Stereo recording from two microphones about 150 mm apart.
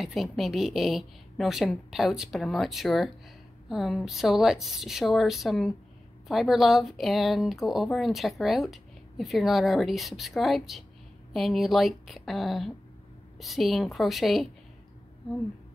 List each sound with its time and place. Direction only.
0.0 s speech: centre (ahead or behind)